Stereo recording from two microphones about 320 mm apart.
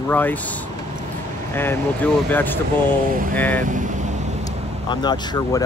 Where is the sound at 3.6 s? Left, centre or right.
Right.